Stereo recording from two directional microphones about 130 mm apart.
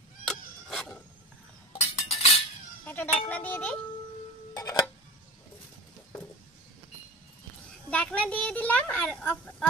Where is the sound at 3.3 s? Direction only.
10° left (ahead or behind).